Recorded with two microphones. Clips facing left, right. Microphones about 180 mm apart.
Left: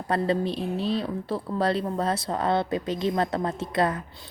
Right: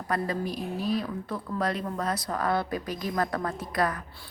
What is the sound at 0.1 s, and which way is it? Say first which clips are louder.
A woman's voice: left 5 dB; 30° left (ahead or behind).